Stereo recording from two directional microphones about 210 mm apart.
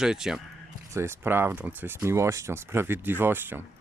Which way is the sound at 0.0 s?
5° right (ahead or behind).